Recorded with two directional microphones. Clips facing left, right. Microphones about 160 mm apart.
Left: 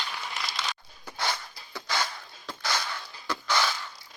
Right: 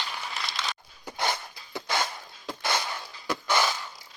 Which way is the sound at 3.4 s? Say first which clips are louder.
Right 2 dB; 15° right (ahead or behind).